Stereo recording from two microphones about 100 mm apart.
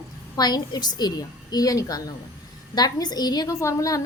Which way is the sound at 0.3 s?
45° left (ahead or behind).